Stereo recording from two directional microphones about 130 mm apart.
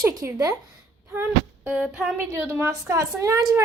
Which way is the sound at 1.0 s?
15° right (ahead or behind).